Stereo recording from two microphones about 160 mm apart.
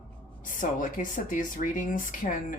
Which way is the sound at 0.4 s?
55° left (ahead or behind).